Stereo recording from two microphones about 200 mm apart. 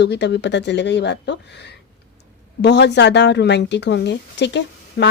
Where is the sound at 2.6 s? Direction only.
60° left (ahead or behind).